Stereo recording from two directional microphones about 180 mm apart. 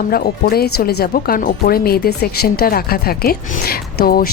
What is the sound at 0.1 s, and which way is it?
Speech, 60° left (ahead or behind).